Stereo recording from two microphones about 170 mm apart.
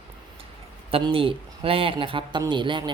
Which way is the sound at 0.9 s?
30° right (ahead or behind).